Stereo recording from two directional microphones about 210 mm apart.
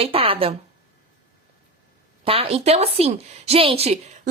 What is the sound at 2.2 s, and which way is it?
A woman's voice, 25° right (ahead or behind).